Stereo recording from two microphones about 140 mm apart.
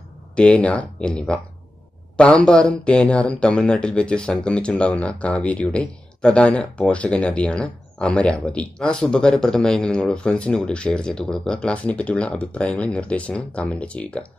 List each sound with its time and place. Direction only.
0.4 s speech: 10° left (ahead or behind)